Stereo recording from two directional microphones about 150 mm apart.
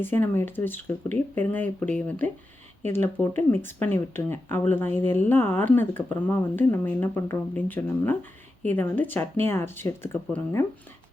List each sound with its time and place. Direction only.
0.0 s speech: 15° left (ahead or behind)